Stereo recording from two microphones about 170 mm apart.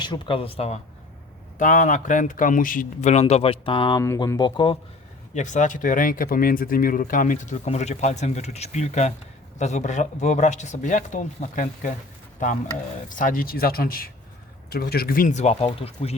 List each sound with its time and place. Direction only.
0.0 s speech: 30° left (ahead or behind)
1.5 s speech: 50° left (ahead or behind); by 4.0 s 30° left (ahead or behind)
4.0 s speech: 15° left (ahead or behind)
5.3 s speech: 45° left (ahead or behind)
13.1 s speech: 50° left (ahead or behind); by 16.1 s 35° left (ahead or behind)